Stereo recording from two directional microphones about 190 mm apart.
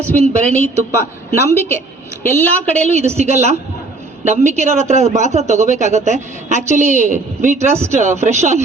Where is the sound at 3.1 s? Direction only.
35° right (ahead or behind).